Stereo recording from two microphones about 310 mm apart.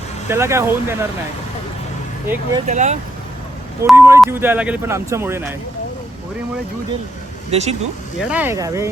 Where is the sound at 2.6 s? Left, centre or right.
Right.